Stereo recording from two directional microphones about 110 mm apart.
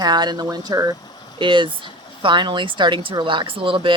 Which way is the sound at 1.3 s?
45° right (ahead or behind).